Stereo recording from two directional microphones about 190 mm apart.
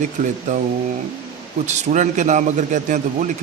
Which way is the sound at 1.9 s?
40° right (ahead or behind).